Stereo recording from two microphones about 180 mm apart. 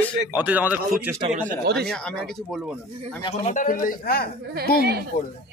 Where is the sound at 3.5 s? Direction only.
45° left (ahead or behind).